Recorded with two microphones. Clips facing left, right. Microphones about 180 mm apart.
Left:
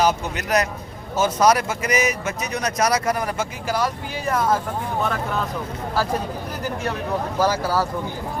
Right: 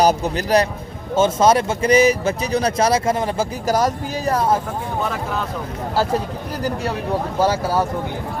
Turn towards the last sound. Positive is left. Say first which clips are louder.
# right 2 dB
turn(degrees=-25)  # may be behind; listen again after turning